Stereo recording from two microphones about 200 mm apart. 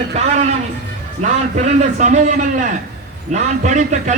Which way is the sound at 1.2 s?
40° right (ahead or behind).